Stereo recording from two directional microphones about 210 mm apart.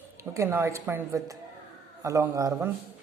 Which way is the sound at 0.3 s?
10° right (ahead or behind).